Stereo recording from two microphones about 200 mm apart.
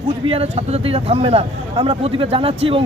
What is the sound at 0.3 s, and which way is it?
Speech, 30° right (ahead or behind).